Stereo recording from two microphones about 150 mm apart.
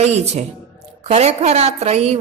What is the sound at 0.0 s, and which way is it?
A woman's voice, 45° right (ahead or behind).